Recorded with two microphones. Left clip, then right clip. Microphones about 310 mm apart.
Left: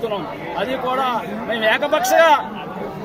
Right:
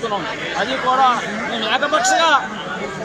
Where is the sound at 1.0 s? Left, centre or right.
Centre.